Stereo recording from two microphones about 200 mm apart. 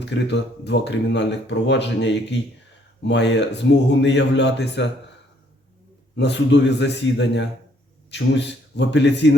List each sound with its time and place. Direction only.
0.0 s speech: 60° left (ahead or behind)
6.1 s speech: 60° left (ahead or behind)